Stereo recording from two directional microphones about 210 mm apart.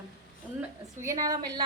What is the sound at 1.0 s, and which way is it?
Speech, 15° right (ahead or behind).